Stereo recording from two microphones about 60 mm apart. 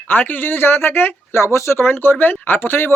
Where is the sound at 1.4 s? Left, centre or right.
Left.